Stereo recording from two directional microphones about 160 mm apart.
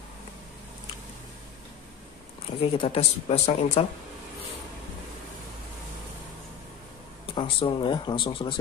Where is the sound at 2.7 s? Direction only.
35° left (ahead or behind).